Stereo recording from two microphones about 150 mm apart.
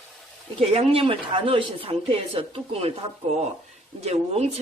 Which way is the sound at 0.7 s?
40° right (ahead or behind).